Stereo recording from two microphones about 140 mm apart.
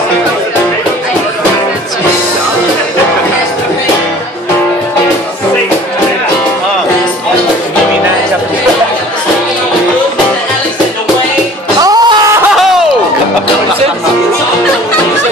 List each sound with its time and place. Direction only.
11.8 s music: 30° right (ahead or behind)